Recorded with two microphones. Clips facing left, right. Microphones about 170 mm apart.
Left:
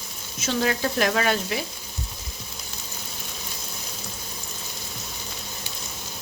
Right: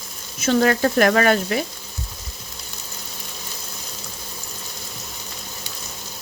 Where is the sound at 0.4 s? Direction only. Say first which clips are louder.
Right 7 dB; 55° right (ahead or behind).